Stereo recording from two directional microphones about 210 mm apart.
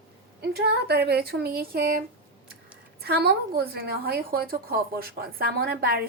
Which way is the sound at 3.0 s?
50° right (ahead or behind).